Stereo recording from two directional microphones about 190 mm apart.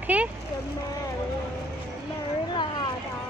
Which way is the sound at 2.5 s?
25° left (ahead or behind).